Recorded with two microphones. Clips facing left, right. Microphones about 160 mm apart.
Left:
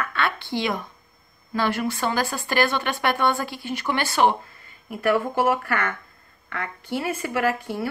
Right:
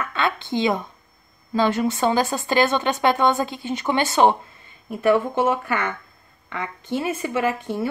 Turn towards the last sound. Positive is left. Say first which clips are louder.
# right 1 dB
turn(degrees=-20)  # may be behind; listen again after turning